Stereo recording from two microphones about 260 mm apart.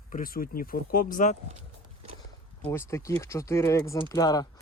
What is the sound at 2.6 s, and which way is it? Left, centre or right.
Speech, centre.